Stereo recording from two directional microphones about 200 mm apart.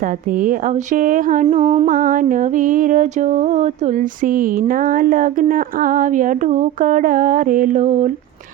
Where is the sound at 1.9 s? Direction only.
45° right (ahead or behind).